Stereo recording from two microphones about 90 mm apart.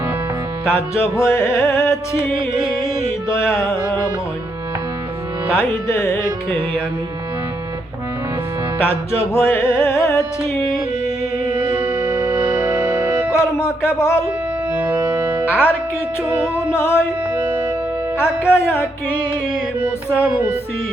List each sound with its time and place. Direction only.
0.7 s music: 25° left (ahead or behind)
5.9 s music: 25° left (ahead or behind)
8.8 s music: 25° left (ahead or behind)
11.7 s music: 60° right (ahead or behind)
12.5 s music: 20° right (ahead or behind)
13.3 s speech: 30° left (ahead or behind)
14.7 s music: 20° right (ahead or behind)
15.4 s speech: 25° left (ahead or behind)
16.7 s music: 30° left (ahead or behind)
18.2 s music: 25° left (ahead or behind)